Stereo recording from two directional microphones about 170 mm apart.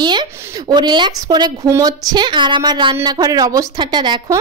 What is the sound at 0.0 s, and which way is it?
A woman's voice, 25° right (ahead or behind).